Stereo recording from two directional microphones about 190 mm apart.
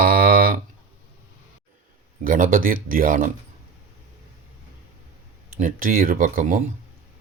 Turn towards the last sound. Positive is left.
turn(degrees=-45)  # may be behind; listen again after turning